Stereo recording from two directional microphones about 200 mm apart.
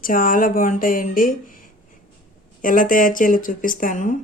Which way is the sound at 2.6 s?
45° left (ahead or behind).